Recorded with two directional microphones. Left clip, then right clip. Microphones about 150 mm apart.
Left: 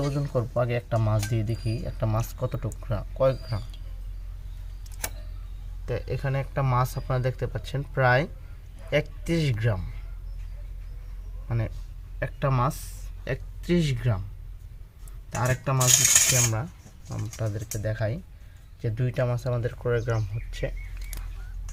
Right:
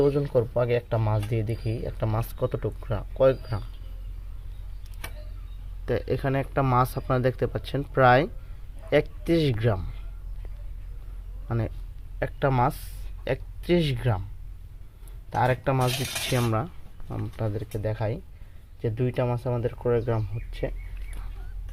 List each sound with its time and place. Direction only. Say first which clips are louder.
0.0 s speech: right 7 dB; centre (ahead or behind)
5.8 s speech: right 5 dB; 25° right (ahead or behind)
11.4 s a man's voice: right 3 dB; 15° right (ahead or behind)
15.3 s speech: right 4 dB; 10° right (ahead or behind)
16.3 s speech: even; 20° right (ahead or behind); by 20.7 s 5° right (ahead or behind)